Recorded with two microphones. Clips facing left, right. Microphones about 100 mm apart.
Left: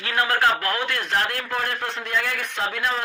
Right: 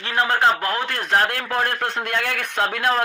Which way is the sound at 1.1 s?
50° right (ahead or behind).